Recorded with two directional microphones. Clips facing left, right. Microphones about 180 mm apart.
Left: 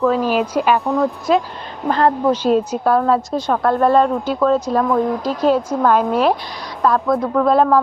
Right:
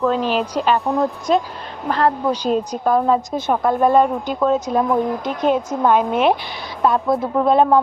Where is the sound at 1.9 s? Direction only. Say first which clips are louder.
Left 3 dB; centre (ahead or behind).